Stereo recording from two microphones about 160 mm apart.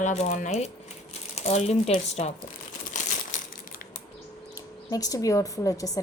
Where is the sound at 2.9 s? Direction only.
50° left (ahead or behind).